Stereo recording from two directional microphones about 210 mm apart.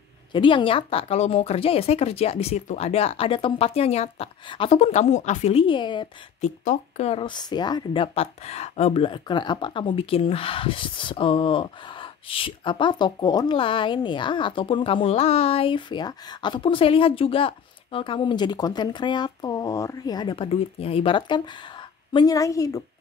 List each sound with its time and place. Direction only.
0.3 s speech: 25° left (ahead or behind)
6.6 s a woman's voice: 35° left (ahead or behind); by 22.8 s 15° left (ahead or behind)